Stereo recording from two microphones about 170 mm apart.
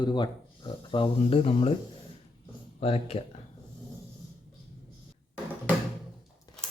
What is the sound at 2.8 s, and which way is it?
Speech, 35° left (ahead or behind).